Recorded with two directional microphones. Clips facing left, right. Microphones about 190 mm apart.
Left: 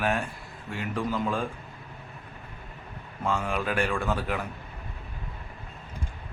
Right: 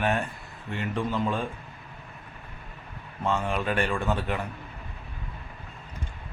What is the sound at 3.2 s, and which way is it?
Mantra, centre (ahead or behind).